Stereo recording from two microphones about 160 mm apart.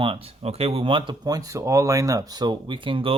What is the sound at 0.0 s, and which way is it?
Speech, 35° right (ahead or behind).